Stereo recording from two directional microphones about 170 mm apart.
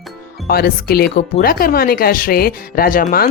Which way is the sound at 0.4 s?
60° left (ahead or behind).